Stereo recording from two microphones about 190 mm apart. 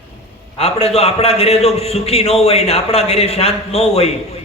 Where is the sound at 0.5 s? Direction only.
30° left (ahead or behind).